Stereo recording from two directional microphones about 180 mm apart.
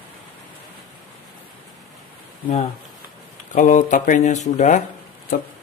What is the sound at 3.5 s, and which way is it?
Speech, 45° left (ahead or behind).